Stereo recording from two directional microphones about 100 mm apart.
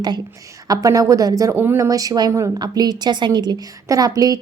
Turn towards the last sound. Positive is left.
turn(degrees=-40)  # may be behind; listen again after turning